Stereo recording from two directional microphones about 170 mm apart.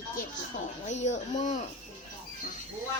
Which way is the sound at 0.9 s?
45° left (ahead or behind).